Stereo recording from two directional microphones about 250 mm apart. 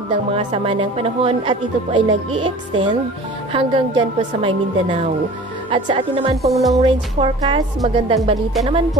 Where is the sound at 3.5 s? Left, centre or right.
Centre.